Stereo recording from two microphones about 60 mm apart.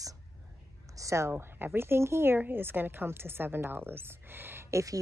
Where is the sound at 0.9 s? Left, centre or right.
Right.